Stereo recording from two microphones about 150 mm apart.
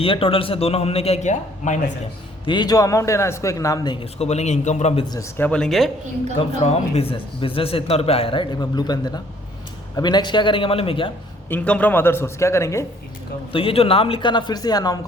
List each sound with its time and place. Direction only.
0.0 s a man's voice: 40° left (ahead or behind); by 1.8 s 55° left (ahead or behind)
2.5 s a man's voice: 25° left (ahead or behind)
4.0 s a man's voice: 45° left (ahead or behind)
5.4 s speech: 5° left (ahead or behind)
6.6 s a man's voice: 45° left (ahead or behind)
11.4 s a man's voice: 10° left (ahead or behind)
13.5 s a man's voice: 35° left (ahead or behind)